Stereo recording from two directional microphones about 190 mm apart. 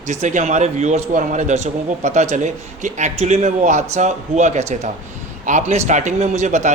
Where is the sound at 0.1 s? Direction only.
40° right (ahead or behind).